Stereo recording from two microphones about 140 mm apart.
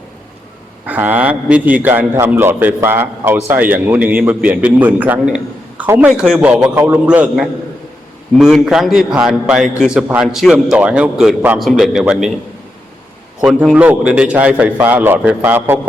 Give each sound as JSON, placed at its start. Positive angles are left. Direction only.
{"t": 0.9, "sound": "a man's voice", "side_deg": -10}
{"t": 13.4, "sound": "a man's voice", "side_deg": -10}